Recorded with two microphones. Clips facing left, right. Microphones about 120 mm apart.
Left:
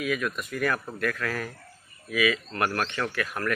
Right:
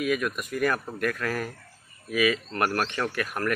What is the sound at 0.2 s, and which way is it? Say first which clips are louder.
Speech: right 2 dB; 15° right (ahead or behind).